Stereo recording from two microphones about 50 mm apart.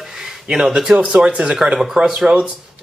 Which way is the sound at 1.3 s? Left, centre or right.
Right.